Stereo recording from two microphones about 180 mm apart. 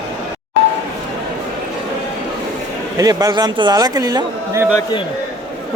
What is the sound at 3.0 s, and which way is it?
Speech, 20° right (ahead or behind).